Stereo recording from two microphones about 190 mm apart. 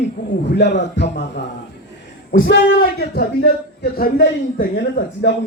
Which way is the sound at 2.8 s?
55° left (ahead or behind).